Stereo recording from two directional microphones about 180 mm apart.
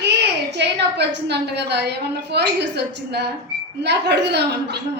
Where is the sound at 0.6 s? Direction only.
75° right (ahead or behind).